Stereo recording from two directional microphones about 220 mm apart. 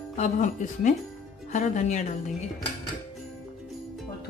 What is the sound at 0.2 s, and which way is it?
Speech, 35° left (ahead or behind).